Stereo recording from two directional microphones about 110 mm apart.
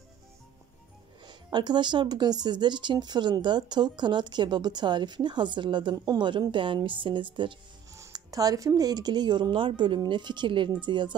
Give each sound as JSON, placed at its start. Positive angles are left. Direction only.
{"t": 1.2, "sound": "speech", "side_deg": -45}
{"t": 7.9, "sound": "speech", "side_deg": -30}